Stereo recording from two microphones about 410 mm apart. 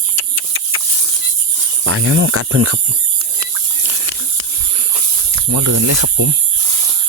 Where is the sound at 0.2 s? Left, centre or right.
Right.